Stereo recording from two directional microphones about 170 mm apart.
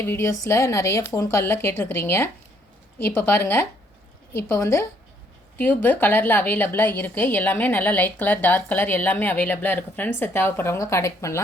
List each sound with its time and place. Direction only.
0.0 s a woman's voice: 15° left (ahead or behind)